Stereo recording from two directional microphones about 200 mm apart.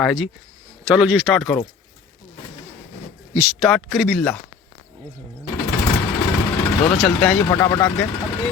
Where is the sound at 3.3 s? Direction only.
10° right (ahead or behind).